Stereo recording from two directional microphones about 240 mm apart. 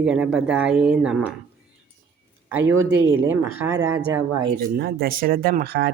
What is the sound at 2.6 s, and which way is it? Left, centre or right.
Speech, right.